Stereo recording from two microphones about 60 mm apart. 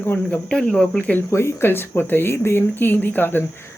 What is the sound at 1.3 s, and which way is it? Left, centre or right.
Speech, left.